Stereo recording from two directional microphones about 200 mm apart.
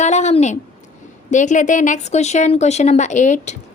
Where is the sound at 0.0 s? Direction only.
35° left (ahead or behind).